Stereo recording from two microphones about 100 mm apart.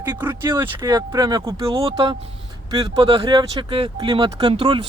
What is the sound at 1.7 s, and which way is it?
Speech, 60° right (ahead or behind).